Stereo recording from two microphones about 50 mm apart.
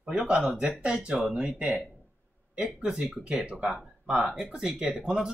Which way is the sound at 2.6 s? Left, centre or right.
Centre.